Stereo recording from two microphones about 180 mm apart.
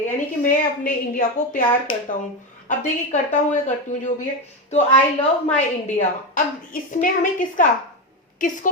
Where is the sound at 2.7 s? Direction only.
45° left (ahead or behind).